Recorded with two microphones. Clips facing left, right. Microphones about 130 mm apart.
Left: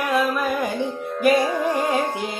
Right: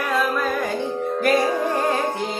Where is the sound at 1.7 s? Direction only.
15° left (ahead or behind).